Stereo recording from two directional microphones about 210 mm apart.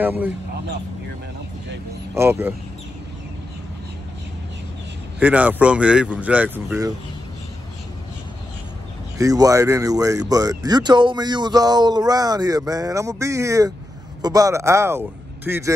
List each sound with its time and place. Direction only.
0.0 s speech: 10° right (ahead or behind)
2.1 s speech: 10° right (ahead or behind)
5.2 s speech: 5° right (ahead or behind)
9.2 s speech: 15° right (ahead or behind)